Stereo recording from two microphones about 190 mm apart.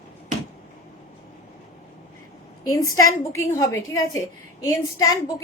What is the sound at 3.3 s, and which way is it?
A woman's voice, 15° left (ahead or behind).